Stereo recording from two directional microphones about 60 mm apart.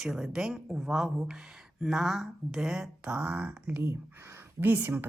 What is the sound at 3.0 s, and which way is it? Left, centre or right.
Speech, right.